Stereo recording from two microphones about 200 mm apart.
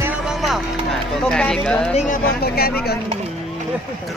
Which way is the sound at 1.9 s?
45° left (ahead or behind).